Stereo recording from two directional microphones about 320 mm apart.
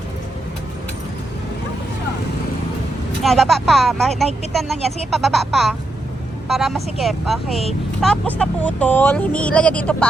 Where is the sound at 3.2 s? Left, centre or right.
Centre.